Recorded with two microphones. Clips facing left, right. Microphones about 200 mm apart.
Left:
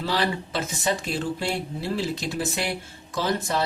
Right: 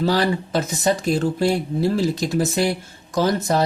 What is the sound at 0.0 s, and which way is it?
Speech, 40° right (ahead or behind).